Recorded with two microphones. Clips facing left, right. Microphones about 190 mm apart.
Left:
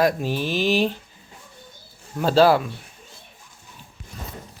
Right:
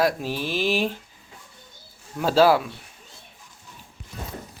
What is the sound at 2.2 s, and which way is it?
Speech, 5° right (ahead or behind).